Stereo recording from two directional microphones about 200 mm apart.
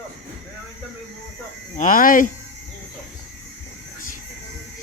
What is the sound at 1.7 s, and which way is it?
Speech, 40° left (ahead or behind).